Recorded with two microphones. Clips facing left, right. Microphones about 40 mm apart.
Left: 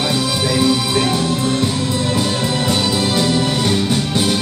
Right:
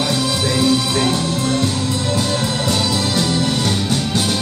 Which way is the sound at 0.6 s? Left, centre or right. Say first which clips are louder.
Even; centre.